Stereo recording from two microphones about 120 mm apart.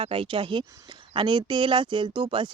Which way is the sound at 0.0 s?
50° right (ahead or behind).